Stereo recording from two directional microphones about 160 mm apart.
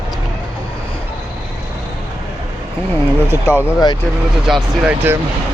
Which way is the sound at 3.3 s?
15° right (ahead or behind).